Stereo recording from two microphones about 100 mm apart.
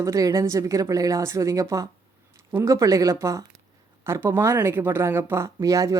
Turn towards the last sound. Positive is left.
turn(degrees=-30)  # may be behind; listen again after turning